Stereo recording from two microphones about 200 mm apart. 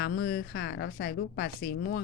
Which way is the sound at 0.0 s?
50° left (ahead or behind).